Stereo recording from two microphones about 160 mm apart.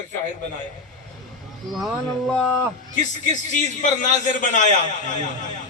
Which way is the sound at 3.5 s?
50° left (ahead or behind).